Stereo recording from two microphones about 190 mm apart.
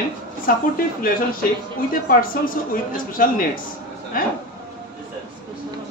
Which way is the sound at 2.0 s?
50° left (ahead or behind).